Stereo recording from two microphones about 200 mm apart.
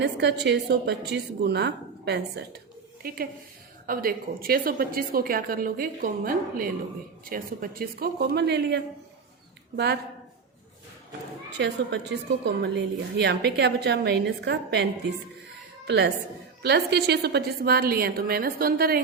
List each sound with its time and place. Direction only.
0.0 s a woman's voice: 60° right (ahead or behind)
11.5 s a woman's voice: 60° right (ahead or behind)